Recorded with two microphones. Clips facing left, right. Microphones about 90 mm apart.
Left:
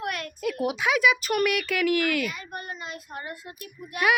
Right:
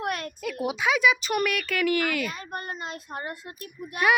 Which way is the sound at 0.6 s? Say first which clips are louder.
Even; 5° left (ahead or behind).